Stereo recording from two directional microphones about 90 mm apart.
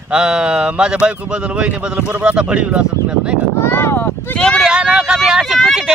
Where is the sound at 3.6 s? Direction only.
25° left (ahead or behind).